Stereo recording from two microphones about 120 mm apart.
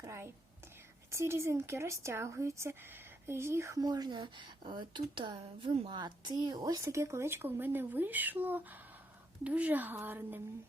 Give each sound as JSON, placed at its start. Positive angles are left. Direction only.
{"t": 0.0, "sound": "a woman's voice", "side_deg": -20}